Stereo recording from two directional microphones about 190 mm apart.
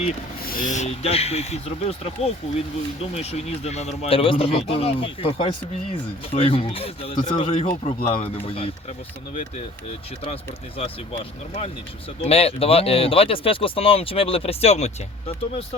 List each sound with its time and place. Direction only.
0.4 s speech: 45° left (ahead or behind); by 7.7 s 30° left (ahead or behind)
7.7 s speech: 40° left (ahead or behind)
8.0 s speech: 30° left (ahead or behind)
10.8 s speech: 30° left (ahead or behind)